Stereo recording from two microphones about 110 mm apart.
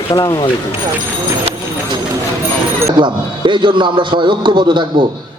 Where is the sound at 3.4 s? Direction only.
45° right (ahead or behind).